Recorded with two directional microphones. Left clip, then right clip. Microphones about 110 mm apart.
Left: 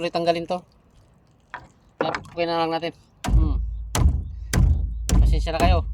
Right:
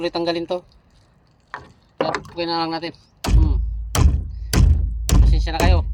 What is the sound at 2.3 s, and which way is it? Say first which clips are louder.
Speech: left 4 dB; 40° left (ahead or behind).